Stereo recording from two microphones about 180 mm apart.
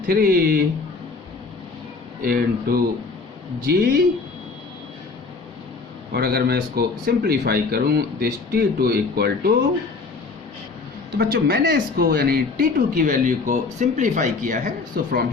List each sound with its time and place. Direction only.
0.1 s speech: 55° right (ahead or behind)
2.2 s speech: 55° right (ahead or behind)
6.1 s speech: 60° right (ahead or behind)
11.2 s speech: 55° right (ahead or behind)
15.0 s speech: 55° right (ahead or behind)